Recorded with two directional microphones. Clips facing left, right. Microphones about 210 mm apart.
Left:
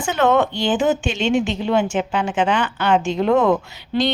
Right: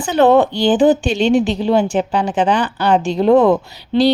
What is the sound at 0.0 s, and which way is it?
A woman's voice, 35° right (ahead or behind).